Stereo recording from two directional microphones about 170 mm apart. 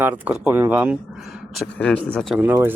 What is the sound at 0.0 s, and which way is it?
Speech, 10° right (ahead or behind).